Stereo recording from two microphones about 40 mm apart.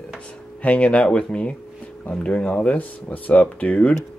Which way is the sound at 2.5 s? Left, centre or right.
Left.